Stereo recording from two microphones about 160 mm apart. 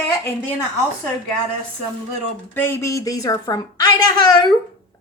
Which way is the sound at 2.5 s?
15° left (ahead or behind).